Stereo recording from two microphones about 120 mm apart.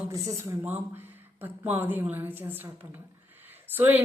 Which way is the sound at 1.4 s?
15° right (ahead or behind).